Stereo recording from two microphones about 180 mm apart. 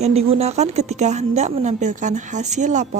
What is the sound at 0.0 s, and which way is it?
A woman's voice, 35° right (ahead or behind).